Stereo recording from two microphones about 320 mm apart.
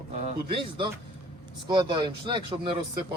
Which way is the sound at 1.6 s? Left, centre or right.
Centre.